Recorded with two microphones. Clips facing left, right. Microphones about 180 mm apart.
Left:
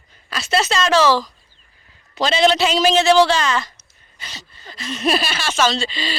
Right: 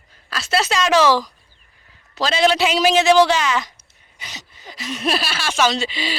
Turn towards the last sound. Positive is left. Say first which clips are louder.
# even
turn(degrees=-15)  # may be behind; listen again after turning